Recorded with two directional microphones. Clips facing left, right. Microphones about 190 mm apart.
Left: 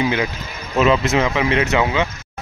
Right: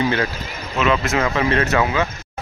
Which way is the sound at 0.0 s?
15° left (ahead or behind).